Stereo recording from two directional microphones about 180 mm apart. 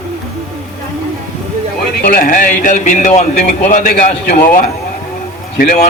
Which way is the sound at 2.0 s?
50° left (ahead or behind).